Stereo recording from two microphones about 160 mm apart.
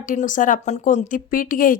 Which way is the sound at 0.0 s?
55° left (ahead or behind).